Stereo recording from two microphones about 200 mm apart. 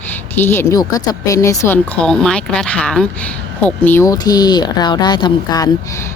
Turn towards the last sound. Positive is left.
turn(degrees=20)  # may be behind; listen again after turning